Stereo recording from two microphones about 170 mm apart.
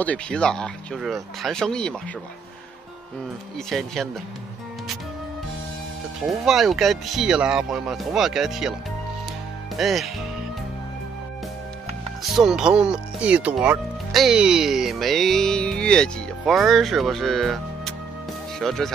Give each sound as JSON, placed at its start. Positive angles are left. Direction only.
{"t": 0.0, "sound": "speech", "side_deg": 5}
{"t": 3.5, "sound": "speech", "side_deg": 0}
{"t": 6.2, "sound": "speech", "side_deg": 0}
{"t": 9.8, "sound": "speech", "side_deg": 0}
{"t": 12.2, "sound": "speech", "side_deg": 0}